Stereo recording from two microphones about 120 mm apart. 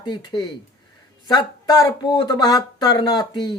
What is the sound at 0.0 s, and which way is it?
Speech, 40° left (ahead or behind).